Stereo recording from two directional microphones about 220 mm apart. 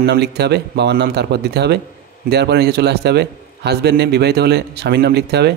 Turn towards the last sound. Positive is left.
turn(degrees=-50)  # may be behind; listen again after turning